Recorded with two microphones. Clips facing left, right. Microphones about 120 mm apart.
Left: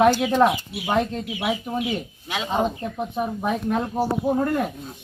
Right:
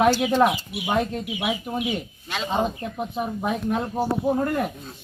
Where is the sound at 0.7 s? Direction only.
20° right (ahead or behind).